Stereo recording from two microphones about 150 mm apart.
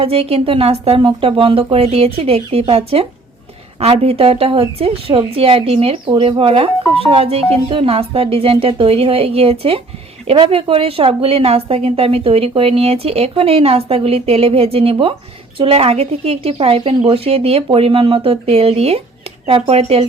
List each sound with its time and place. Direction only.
0.0 s speech: 40° right (ahead or behind)